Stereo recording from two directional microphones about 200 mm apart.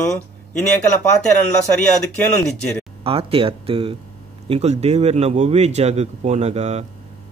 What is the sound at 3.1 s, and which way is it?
Speech, 30° right (ahead or behind).